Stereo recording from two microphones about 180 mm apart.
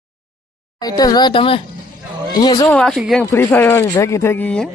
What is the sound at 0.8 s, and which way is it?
Speech, 20° left (ahead or behind).